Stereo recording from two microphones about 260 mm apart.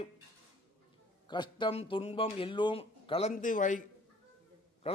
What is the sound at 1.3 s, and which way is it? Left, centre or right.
A man's voice, centre.